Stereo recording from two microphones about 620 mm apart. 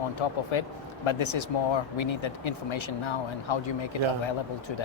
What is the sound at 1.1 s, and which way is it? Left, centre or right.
Speech, left.